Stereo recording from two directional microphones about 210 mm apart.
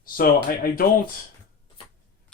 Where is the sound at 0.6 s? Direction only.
45° left (ahead or behind).